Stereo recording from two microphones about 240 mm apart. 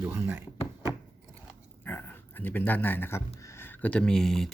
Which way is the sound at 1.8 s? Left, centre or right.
Centre.